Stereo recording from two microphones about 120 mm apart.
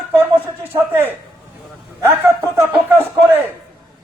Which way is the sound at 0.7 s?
15° right (ahead or behind).